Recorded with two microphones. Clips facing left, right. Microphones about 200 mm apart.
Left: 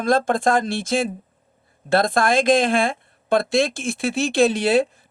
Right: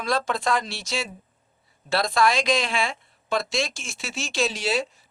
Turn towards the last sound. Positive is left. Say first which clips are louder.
# left 8 dB
turn(degrees=55)  # may be behind; listen again after turning